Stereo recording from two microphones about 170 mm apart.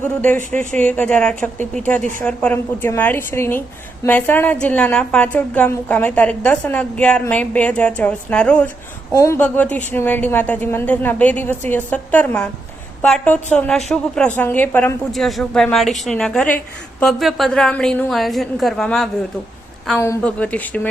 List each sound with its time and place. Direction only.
0.0 s a woman's voice: 10° left (ahead or behind)
15.1 s a woman's voice: centre (ahead or behind)